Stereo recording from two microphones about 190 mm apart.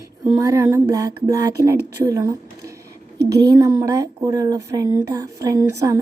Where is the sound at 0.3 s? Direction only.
15° right (ahead or behind).